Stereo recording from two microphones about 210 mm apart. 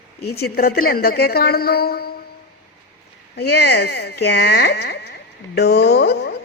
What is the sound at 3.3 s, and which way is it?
A woman's voice, 50° left (ahead or behind).